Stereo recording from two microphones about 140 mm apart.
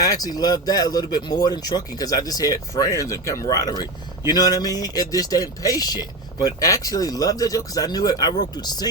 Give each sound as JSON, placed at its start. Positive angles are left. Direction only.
{"t": 0.0, "sound": "a man's voice", "side_deg": 25}